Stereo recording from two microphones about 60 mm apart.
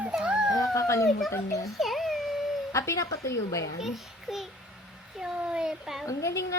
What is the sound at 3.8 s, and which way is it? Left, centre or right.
Speech, centre.